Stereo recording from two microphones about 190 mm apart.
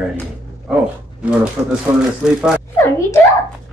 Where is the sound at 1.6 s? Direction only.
20° right (ahead or behind).